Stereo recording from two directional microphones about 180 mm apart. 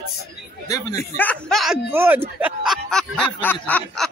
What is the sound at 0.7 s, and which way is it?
A man's voice, 20° left (ahead or behind).